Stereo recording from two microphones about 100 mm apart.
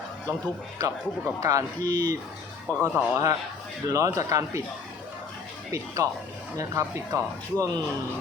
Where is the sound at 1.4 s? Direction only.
35° right (ahead or behind).